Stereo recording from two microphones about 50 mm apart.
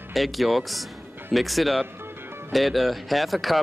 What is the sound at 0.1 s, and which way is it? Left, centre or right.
Speech, centre.